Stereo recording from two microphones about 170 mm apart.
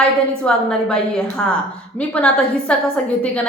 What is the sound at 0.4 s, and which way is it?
A woman's voice, 5° left (ahead or behind).